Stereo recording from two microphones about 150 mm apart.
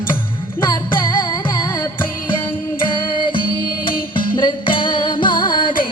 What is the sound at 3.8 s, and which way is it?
Music, 35° left (ahead or behind).